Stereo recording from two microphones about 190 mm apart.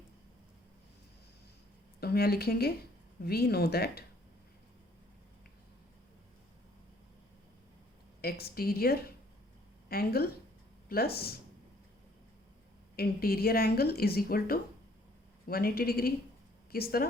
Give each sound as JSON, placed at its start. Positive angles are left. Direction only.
{"t": 2.0, "sound": "speech", "side_deg": 55}
{"t": 8.2, "sound": "speech", "side_deg": 55}
{"t": 13.0, "sound": "speech", "side_deg": 55}